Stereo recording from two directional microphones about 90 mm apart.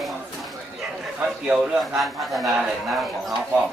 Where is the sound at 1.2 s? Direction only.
10° right (ahead or behind).